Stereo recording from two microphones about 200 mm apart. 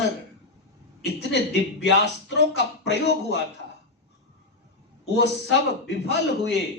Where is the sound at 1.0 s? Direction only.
60° left (ahead or behind).